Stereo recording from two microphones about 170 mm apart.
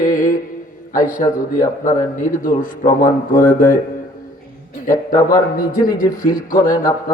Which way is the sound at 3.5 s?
50° left (ahead or behind).